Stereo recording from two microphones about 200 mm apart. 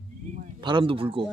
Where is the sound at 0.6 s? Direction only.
25° right (ahead or behind).